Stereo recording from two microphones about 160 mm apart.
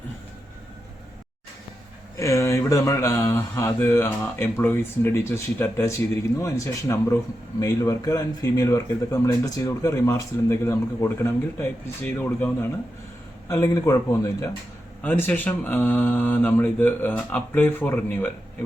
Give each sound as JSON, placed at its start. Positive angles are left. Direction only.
{"t": 2.1, "sound": "speech", "side_deg": 20}